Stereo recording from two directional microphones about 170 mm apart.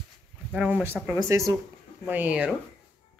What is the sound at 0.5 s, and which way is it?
Speech, 5° right (ahead or behind).